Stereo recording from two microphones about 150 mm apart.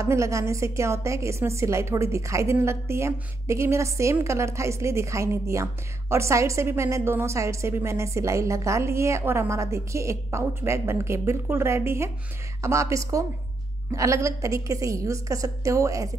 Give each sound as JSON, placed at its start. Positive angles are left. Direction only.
{"t": 0.0, "sound": "a woman's voice", "side_deg": -20}